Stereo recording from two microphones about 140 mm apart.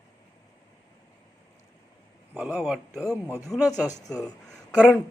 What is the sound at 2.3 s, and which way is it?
A man's voice, 5° right (ahead or behind).